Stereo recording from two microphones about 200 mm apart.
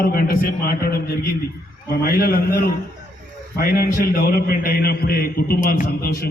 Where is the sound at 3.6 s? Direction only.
50° left (ahead or behind).